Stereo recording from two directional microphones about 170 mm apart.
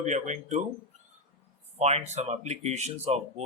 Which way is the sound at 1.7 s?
40° right (ahead or behind).